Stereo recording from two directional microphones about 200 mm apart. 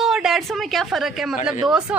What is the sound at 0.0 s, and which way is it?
A woman's voice, centre (ahead or behind).